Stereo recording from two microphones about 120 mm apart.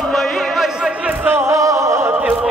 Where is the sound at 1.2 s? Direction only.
20° right (ahead or behind).